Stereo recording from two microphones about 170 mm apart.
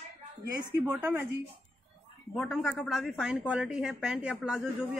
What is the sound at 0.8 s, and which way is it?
Speech, 10° right (ahead or behind).